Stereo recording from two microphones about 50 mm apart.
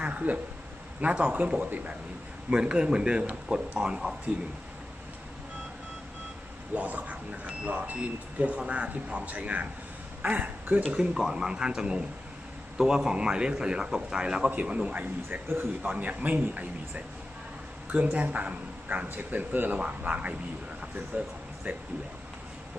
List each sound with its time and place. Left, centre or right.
0.0 s a sound: right
1.0 s speech: right
6.7 s speech: right
10.9 s a man's voice: centre
14.9 s speech: right
21.1 s speech: right